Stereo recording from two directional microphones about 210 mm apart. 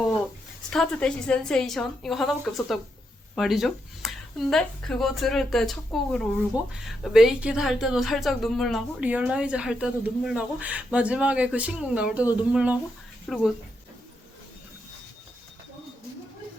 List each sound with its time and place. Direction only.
0.7 s a woman's voice: 5° left (ahead or behind)